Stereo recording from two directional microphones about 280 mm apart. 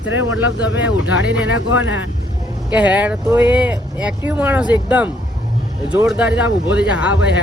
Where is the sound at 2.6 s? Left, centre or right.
Centre.